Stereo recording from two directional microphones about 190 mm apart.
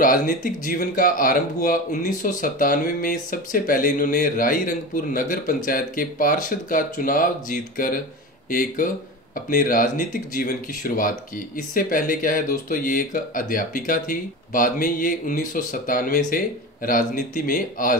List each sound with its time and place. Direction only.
0.0 s speech: 45° left (ahead or behind)